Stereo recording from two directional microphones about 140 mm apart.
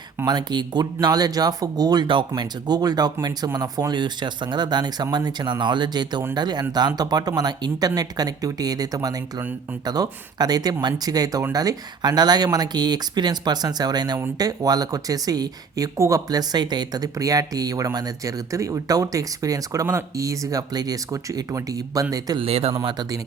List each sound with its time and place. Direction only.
0.3 s speech: 30° right (ahead or behind)
22.4 s speech: 45° right (ahead or behind)
22.8 s speech: 30° right (ahead or behind)